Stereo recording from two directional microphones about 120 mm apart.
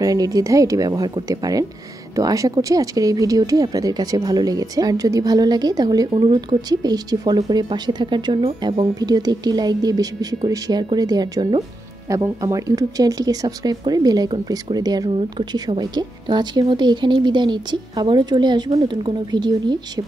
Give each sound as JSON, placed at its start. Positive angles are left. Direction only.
{"t": 0.0, "sound": "speech", "side_deg": -30}